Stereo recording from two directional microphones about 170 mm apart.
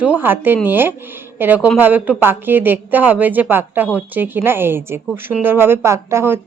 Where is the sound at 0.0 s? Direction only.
10° right (ahead or behind).